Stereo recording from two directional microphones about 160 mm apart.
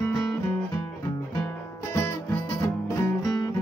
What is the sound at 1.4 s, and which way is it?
Music, 15° left (ahead or behind).